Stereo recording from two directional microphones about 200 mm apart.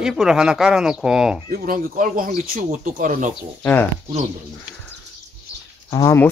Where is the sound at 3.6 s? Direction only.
10° left (ahead or behind).